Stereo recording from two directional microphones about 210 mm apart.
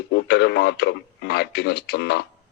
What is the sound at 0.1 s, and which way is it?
Speech, 55° left (ahead or behind).